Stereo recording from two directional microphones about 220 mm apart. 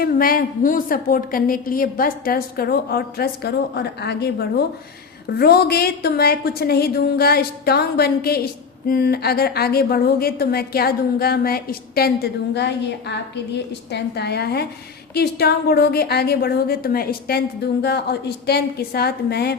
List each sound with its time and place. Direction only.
0.0 s a woman's voice: 40° left (ahead or behind)